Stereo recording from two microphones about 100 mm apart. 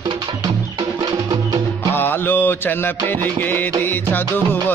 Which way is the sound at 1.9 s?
20° left (ahead or behind).